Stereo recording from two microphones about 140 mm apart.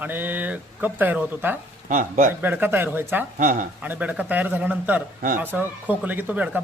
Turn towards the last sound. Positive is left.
turn(degrees=-10)  # may be behind; listen again after turning